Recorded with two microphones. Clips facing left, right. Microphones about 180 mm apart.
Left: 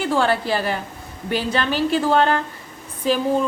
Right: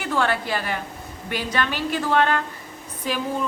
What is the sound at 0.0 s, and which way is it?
A woman's voice, 30° left (ahead or behind).